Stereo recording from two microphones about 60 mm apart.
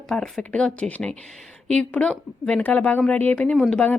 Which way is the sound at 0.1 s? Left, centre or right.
Centre.